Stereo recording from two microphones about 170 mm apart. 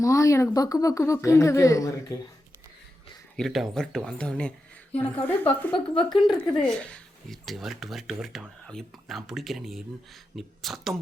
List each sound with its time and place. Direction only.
0.0 s a woman's voice: 20° left (ahead or behind)
3.3 s speech: centre (ahead or behind)
5.7 s a woman's voice: 30° left (ahead or behind)
6.1 s speech: centre (ahead or behind)